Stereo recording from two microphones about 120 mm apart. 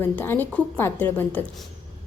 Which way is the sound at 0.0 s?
15° left (ahead or behind).